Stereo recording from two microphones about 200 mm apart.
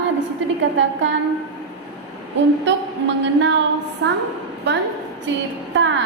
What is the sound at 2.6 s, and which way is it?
Speech, 65° right (ahead or behind).